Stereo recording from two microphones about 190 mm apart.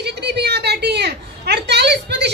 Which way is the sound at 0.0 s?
60° right (ahead or behind).